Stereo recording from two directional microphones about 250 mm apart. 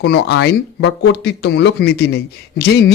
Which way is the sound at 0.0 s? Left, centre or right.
Left.